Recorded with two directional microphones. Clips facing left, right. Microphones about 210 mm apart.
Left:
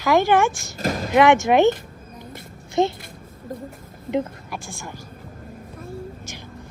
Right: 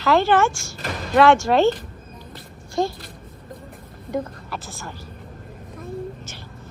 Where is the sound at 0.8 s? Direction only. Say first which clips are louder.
Left 6 dB; 40° left (ahead or behind).